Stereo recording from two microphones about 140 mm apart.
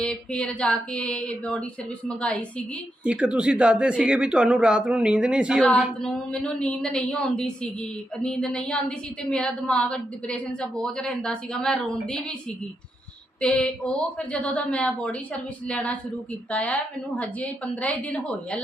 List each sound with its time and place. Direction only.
0.0 s a woman's voice: 5° left (ahead or behind)
3.0 s speech: 10° right (ahead or behind)
5.6 s a woman's voice: 5° left (ahead or behind)
13.4 s a woman's voice: 5° left (ahead or behind)